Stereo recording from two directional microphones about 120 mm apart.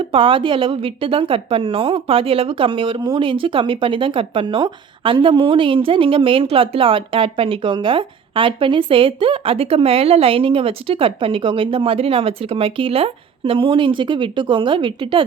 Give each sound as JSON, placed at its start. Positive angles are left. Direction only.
{"t": 0.0, "sound": "speech", "side_deg": -45}